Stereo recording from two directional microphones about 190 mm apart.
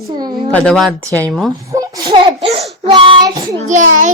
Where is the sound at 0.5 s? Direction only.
5° left (ahead or behind).